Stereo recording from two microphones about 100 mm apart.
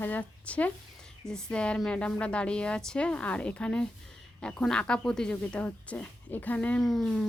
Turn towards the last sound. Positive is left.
turn(degrees=5)  # may be behind; listen again after turning